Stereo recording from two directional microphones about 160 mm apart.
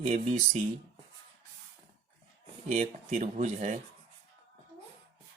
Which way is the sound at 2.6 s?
45° right (ahead or behind).